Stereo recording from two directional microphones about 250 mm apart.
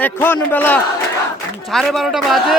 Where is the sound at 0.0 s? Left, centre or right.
Centre.